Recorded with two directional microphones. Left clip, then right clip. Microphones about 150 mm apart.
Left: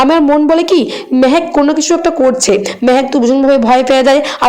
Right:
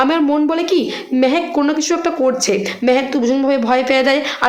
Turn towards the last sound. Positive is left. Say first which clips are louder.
# left 6 dB
turn(degrees=30)  # may be behind; listen again after turning